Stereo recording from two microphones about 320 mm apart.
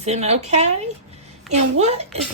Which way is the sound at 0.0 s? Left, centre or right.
Centre.